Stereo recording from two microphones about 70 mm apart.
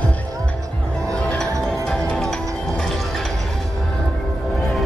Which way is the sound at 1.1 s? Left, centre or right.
Centre.